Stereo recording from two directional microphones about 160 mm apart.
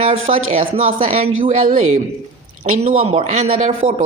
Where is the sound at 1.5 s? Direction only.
50° right (ahead or behind).